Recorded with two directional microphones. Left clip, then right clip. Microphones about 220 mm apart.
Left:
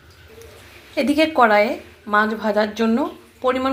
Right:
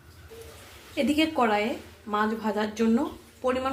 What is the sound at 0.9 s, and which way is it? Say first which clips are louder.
A woman's voice: left 8 dB; 15° left (ahead or behind).